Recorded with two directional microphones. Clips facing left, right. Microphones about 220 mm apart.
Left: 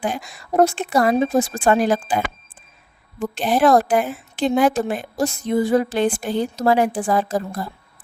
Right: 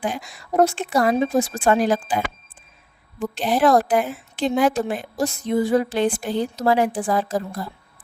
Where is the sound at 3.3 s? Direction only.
50° left (ahead or behind).